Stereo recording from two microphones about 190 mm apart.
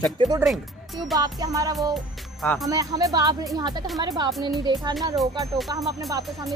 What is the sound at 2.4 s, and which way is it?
Speech, 5° left (ahead or behind).